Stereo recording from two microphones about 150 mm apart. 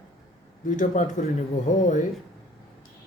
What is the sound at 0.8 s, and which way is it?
Speech, 55° left (ahead or behind).